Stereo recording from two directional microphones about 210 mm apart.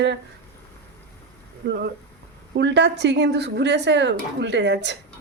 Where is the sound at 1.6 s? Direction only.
50° right (ahead or behind).